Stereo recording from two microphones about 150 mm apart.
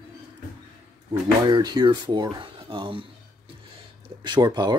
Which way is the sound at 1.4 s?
30° right (ahead or behind).